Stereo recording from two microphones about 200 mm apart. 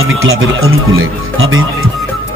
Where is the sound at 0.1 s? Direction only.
80° right.